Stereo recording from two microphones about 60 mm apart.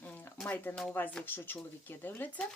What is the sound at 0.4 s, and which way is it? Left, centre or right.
Speech, left.